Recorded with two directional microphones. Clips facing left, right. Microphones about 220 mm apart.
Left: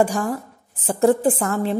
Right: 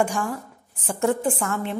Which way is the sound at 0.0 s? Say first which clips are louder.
Left 4 dB; 35° left (ahead or behind).